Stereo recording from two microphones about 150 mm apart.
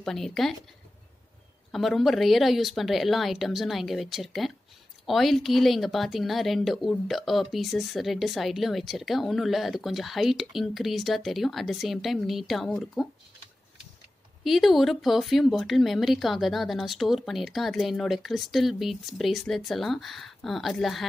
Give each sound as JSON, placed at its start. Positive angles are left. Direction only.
{"t": 0.0, "sound": "speech", "side_deg": 5}
{"t": 1.7, "sound": "speech", "side_deg": 0}
{"t": 14.4, "sound": "speech", "side_deg": 0}